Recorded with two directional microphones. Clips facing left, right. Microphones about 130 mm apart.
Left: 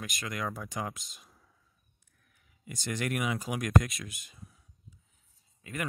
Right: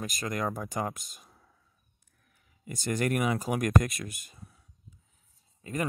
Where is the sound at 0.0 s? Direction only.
45° right (ahead or behind).